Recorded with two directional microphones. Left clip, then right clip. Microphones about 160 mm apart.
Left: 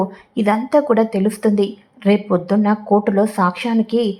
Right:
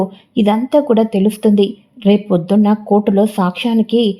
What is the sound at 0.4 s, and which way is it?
Speech, 35° right (ahead or behind).